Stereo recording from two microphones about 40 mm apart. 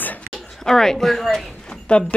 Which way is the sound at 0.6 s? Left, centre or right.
Centre.